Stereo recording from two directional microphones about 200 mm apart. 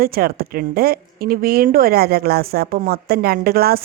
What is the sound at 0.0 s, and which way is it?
A woman's voice, 50° right (ahead or behind).